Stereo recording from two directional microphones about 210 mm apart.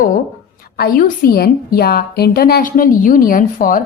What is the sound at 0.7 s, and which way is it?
A woman's voice, 45° left (ahead or behind).